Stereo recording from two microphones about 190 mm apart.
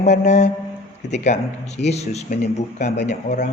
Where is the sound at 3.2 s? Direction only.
40° left (ahead or behind).